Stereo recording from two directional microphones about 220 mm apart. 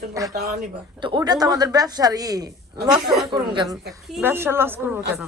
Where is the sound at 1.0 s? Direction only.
20° right (ahead or behind).